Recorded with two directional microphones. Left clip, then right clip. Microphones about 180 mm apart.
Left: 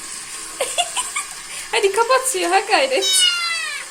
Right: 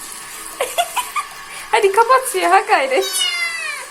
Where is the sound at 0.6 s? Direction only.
Centre (ahead or behind).